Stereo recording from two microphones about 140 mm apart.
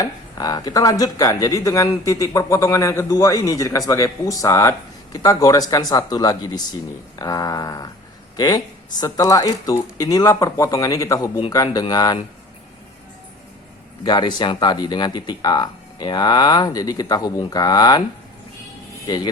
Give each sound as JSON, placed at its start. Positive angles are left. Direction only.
{"t": 0.0, "sound": "speech", "side_deg": 30}
{"t": 14.0, "sound": "speech", "side_deg": 30}
{"t": 19.0, "sound": "speech", "side_deg": 30}